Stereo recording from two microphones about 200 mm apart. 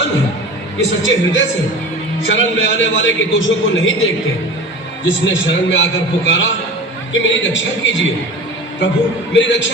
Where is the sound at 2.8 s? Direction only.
65° left (ahead or behind).